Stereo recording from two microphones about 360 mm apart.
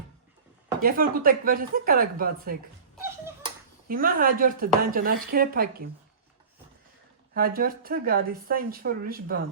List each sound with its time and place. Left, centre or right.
0.8 s speech: right
2.9 s a sound: centre
3.8 s speech: right
7.3 s speech: right